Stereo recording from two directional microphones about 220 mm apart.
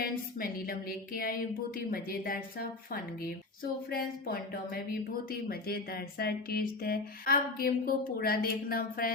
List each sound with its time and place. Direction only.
0.0 s speech: 40° left (ahead or behind)